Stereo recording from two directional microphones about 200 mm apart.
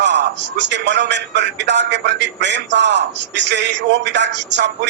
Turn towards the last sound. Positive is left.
turn(degrees=-60)  # may be behind; listen again after turning